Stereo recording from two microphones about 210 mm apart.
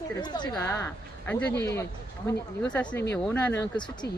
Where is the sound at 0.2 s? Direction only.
20° left (ahead or behind).